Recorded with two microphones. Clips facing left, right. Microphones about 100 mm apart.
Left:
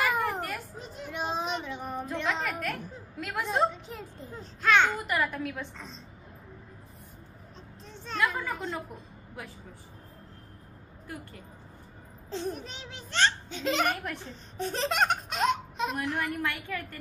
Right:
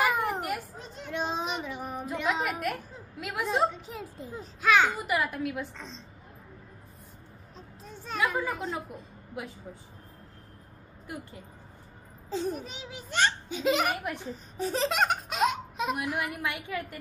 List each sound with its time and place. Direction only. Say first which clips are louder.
0.0 s a sound: right 1 dB; centre (ahead or behind)
0.7 s child singing: right 2 dB; 5° left (ahead or behind)
7.8 s children playing: even; 10° right (ahead or behind)
11.1 s speech: right 2 dB; 20° right (ahead or behind)
12.3 s a child's voice: right 3 dB; centre (ahead or behind)